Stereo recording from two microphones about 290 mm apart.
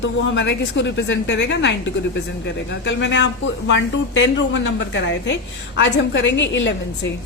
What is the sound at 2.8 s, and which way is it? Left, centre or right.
A woman's voice, left.